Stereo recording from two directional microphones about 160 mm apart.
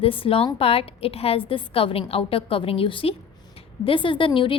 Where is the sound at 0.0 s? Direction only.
35° left (ahead or behind).